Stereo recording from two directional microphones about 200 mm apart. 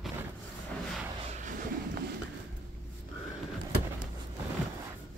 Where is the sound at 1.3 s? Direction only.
40° right (ahead or behind).